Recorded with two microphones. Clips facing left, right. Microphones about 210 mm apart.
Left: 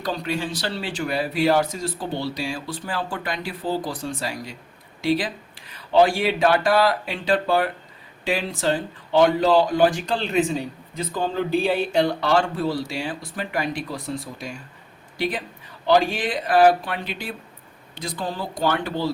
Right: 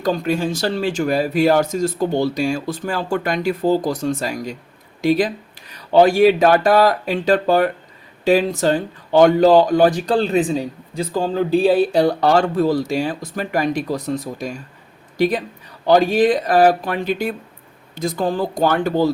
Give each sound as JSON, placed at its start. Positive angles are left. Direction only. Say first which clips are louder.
{"t": 0.0, "sound": "speech", "louder": "right 7 dB", "side_deg": -50}